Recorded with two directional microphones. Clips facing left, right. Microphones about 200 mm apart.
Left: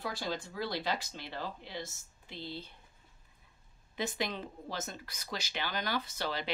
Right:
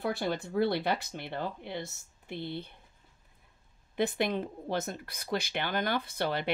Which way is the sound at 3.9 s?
55° right (ahead or behind).